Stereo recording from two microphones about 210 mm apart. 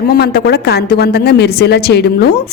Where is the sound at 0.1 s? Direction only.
50° left (ahead or behind).